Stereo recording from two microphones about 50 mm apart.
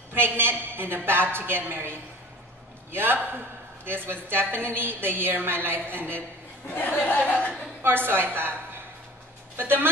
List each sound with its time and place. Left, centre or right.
0.1 s a woman's voice: right
6.9 s speech: left
7.8 s a woman's voice: right